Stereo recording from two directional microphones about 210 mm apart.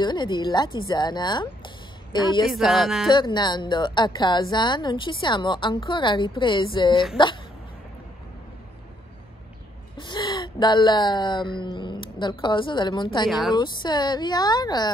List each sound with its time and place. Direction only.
0.0 s a woman's voice: 20° left (ahead or behind)
2.4 s speech: centre (ahead or behind)
3.1 s a woman's voice: 20° left (ahead or behind)
9.9 s speech: 20° left (ahead or behind)
13.3 s speech: centre (ahead or behind)
13.6 s a woman's voice: 20° left (ahead or behind)